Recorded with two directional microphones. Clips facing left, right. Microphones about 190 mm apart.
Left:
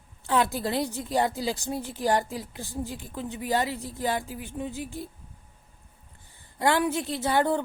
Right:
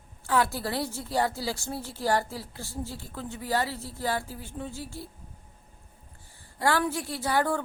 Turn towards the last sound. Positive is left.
turn(degrees=20)  # may be behind; listen again after turning